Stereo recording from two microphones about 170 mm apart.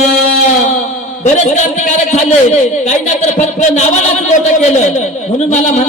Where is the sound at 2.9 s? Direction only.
45° left (ahead or behind).